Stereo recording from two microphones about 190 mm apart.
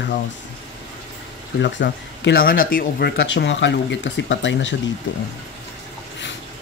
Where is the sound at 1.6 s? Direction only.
65° left (ahead or behind).